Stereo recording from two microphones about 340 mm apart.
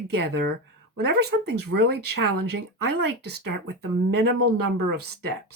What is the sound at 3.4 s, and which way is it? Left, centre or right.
Speech, right.